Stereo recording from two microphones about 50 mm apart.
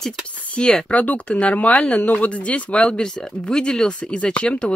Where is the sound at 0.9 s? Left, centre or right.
Left.